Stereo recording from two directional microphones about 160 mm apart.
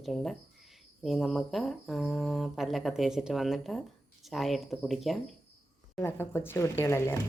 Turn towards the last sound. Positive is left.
turn(degrees=20)  # may be behind; listen again after turning